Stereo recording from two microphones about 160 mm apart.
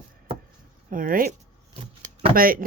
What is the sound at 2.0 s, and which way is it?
Shuffling cards, 65° right (ahead or behind).